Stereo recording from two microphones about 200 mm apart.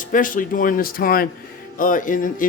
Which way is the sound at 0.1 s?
40° left (ahead or behind).